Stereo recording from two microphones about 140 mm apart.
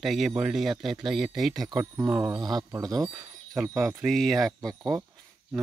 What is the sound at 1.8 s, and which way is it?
Speech, 15° right (ahead or behind).